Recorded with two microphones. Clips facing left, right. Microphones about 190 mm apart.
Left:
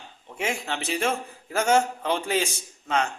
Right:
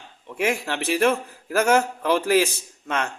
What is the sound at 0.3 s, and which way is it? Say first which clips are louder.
A man's voice: right 5 dB; 60° right (ahead or behind).